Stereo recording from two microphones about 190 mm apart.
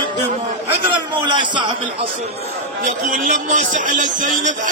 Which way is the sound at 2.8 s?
40° right (ahead or behind).